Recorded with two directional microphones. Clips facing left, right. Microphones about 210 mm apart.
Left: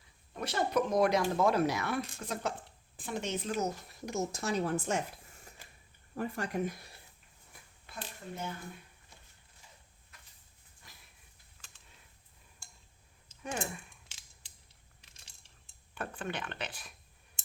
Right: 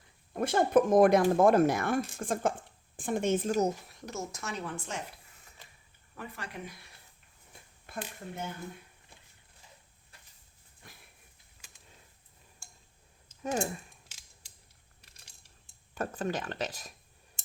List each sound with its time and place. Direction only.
0.3 s speech: 50° right (ahead or behind)
4.0 s speech: 15° left (ahead or behind)
4.3 s a woman's voice: 30° left (ahead or behind)
6.1 s speech: 40° left (ahead or behind)
7.5 s a sound: 25° right (ahead or behind)
13.4 s speech: 35° right (ahead or behind)
16.0 s speech: 40° right (ahead or behind)